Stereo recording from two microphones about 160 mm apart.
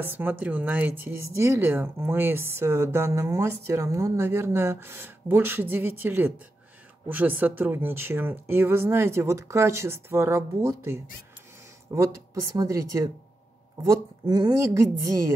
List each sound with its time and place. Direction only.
0.0 s a woman's voice: 10° right (ahead or behind)